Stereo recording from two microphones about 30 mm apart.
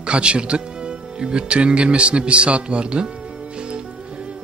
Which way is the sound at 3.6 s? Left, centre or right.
Right.